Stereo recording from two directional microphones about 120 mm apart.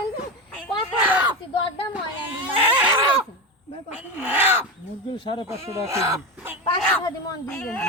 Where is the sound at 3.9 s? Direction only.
15° right (ahead or behind).